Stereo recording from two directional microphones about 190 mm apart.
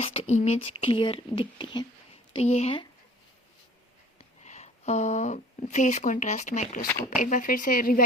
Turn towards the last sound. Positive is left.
turn(degrees=45)  # may be behind; listen again after turning